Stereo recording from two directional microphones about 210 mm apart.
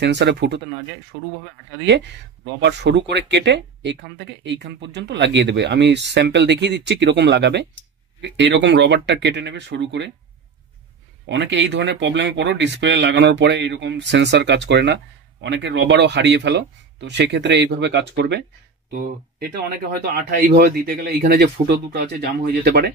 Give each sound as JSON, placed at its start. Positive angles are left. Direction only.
{"t": 0.0, "sound": "speech", "side_deg": -55}
{"t": 11.2, "sound": "speech", "side_deg": -60}
{"t": 18.9, "sound": "speech", "side_deg": -45}